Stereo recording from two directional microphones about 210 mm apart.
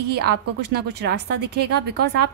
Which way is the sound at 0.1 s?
50° right (ahead or behind).